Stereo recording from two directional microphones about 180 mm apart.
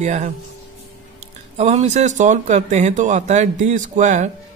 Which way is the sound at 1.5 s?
40° right (ahead or behind).